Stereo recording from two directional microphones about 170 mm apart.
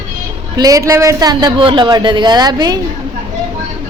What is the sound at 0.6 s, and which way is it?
A man's voice, 20° right (ahead or behind).